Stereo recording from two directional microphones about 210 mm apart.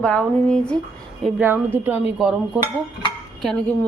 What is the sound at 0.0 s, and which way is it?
Speech, 5° left (ahead or behind).